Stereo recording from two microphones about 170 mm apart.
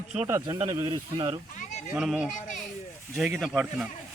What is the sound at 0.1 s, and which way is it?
Speech, 15° right (ahead or behind).